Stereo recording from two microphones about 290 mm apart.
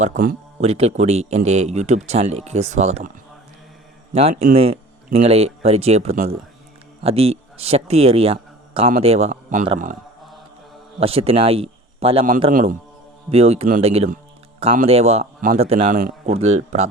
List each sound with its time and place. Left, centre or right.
0.0 s a man's voice: right
4.1 s a man's voice: right
11.0 s a man's voice: centre